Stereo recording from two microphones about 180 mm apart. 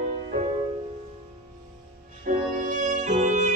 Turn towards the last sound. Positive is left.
turn(degrees=-40)  # may be behind; listen again after turning